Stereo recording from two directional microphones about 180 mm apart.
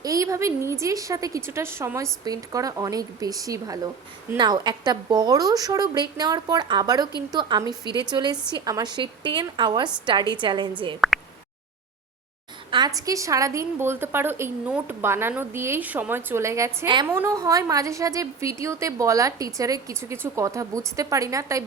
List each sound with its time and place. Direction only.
0.0 s a woman's voice: 20° right (ahead or behind)
13.0 s a woman's voice: 20° right (ahead or behind)